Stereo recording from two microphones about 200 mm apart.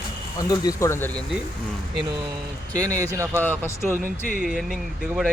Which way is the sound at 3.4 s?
10° left (ahead or behind).